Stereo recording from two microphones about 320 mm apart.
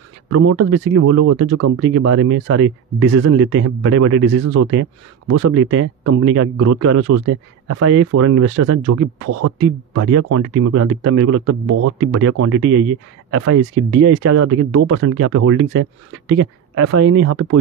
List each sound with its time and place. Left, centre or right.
0.3 s speech: right
5.3 s speech: right